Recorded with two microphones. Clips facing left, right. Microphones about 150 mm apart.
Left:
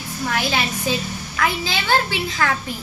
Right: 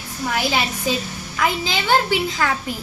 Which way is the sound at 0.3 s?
10° right (ahead or behind).